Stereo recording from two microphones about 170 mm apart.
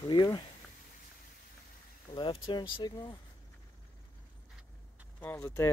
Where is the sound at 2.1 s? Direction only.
30° left (ahead or behind).